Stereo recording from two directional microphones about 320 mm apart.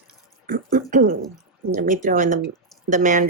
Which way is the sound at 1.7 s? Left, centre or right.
Right.